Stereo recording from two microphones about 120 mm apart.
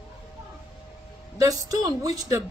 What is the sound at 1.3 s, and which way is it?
Speech, 30° right (ahead or behind).